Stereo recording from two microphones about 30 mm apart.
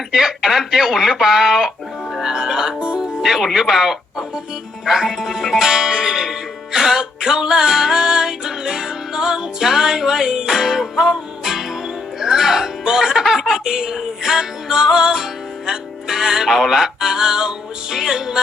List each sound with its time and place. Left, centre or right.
0.1 s music: centre
2.2 s speech: centre
4.9 s music: centre
12.2 s speech: centre
12.8 s music: right